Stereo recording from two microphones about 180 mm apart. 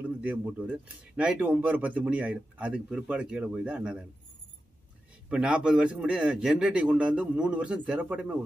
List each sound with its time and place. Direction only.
0.0 s speech: 5° right (ahead or behind)
5.3 s a man's voice: 5° right (ahead or behind)